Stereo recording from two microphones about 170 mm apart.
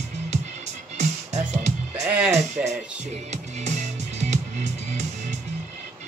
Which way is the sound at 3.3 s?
40° right (ahead or behind).